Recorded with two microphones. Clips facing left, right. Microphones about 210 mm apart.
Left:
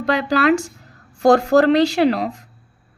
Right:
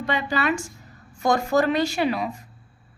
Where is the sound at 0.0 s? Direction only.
80° left.